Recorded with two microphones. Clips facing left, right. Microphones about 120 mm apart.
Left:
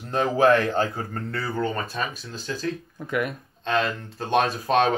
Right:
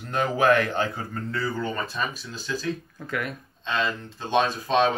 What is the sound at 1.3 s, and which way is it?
Speech, 55° left (ahead or behind).